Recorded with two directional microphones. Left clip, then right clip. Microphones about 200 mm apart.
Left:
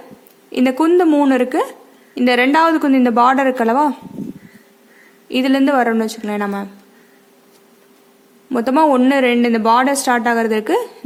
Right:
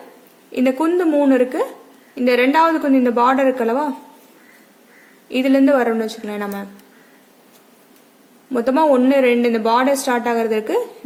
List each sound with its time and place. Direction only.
0.5 s speech: 35° left (ahead or behind)
5.3 s speech: 35° left (ahead or behind)
8.4 s speech: 35° left (ahead or behind)